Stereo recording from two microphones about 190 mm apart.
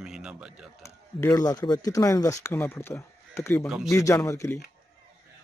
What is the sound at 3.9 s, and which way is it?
Speech, 15° left (ahead or behind).